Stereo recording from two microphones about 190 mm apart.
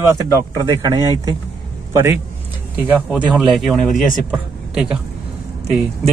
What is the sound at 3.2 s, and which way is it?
A man's voice, centre (ahead or behind).